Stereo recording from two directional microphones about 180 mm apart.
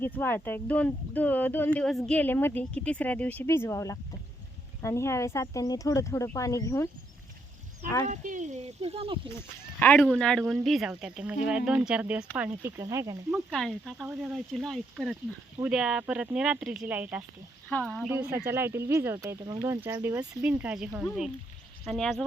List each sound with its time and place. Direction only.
0.0 s speech: 10° left (ahead or behind)
8.0 s speech: 45° right (ahead or behind)
9.8 s speech: 5° left (ahead or behind); by 13.1 s 15° right (ahead or behind)
13.3 s speech: centre (ahead or behind)
17.7 s speech: 5° left (ahead or behind)